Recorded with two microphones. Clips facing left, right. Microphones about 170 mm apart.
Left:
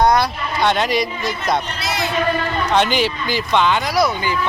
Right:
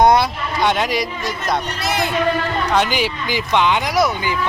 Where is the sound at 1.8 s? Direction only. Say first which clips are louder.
Right 3 dB; 50° right (ahead or behind).